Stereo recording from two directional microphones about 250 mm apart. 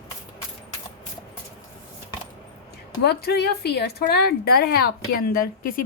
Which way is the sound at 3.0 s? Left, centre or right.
Left.